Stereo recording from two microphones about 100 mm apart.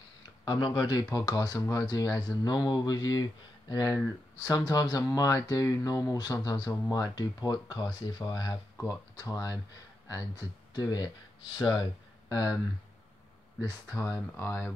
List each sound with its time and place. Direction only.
0.5 s speech: 50° left (ahead or behind)
10.7 s speech: 40° left (ahead or behind)
12.3 s speech: 40° left (ahead or behind)
13.6 s speech: 35° left (ahead or behind)
14.3 s speech: 25° left (ahead or behind)